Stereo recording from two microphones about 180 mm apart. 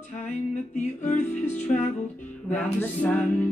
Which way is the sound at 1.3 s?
10° left (ahead or behind).